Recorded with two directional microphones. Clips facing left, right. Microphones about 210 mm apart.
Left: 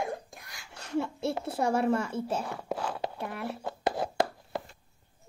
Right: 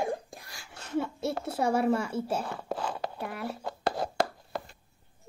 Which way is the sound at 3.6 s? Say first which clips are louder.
Left 1 dB; 20° left (ahead or behind).